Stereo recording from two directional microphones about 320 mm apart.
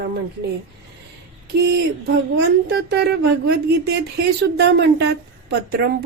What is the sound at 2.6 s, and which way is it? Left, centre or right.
A woman's voice, right.